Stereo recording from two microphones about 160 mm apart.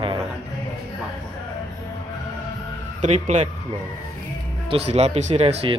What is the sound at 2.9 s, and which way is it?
Speech, 45° right (ahead or behind).